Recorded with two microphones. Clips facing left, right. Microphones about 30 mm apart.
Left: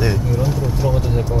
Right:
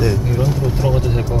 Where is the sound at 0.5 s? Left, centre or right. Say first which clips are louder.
Right 2 dB; right.